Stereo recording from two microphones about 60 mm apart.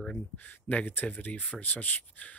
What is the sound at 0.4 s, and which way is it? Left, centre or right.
Speech, left.